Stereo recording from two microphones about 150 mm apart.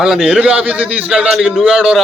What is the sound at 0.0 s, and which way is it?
A man's voice, 5° right (ahead or behind).